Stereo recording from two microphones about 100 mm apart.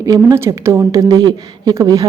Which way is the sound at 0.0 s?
35° right (ahead or behind).